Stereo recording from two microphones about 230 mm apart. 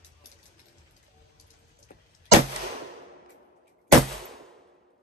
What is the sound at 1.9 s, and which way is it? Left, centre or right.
Vehicle, left.